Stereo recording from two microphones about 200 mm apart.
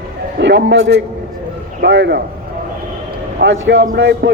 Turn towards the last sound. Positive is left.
turn(degrees=-55)  # may be behind; listen again after turning